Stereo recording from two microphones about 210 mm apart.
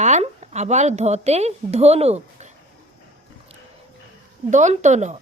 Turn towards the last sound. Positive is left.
turn(degrees=-35)  # may be behind; listen again after turning